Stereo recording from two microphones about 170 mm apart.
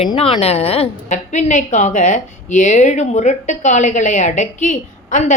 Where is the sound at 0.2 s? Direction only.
35° left (ahead or behind).